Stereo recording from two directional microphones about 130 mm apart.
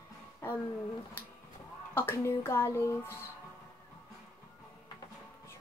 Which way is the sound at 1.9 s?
20° left (ahead or behind).